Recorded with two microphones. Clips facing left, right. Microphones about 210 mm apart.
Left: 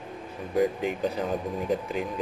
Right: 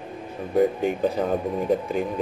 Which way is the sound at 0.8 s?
50° right (ahead or behind).